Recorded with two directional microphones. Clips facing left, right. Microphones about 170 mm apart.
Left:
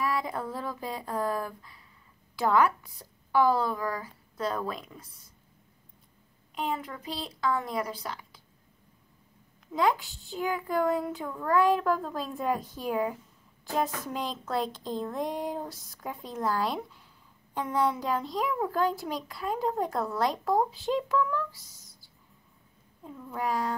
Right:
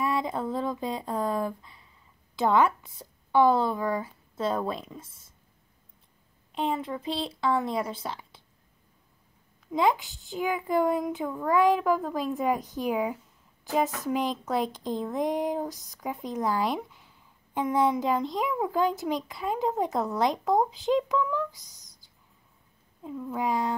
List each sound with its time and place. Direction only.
0.0 s a sound: 20° right (ahead or behind)
2.3 s a woman's voice: 25° right (ahead or behind)
6.8 s speech: 25° right (ahead or behind)
9.7 s a woman's voice: 20° right (ahead or behind)
18.5 s a woman's voice: 10° right (ahead or behind)
23.4 s speech: 20° right (ahead or behind)